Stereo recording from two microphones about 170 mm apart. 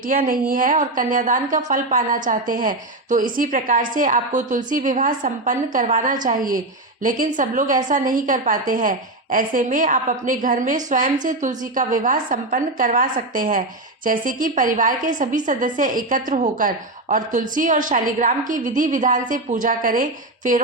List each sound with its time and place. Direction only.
0.0 s a woman's voice: 55° right (ahead or behind)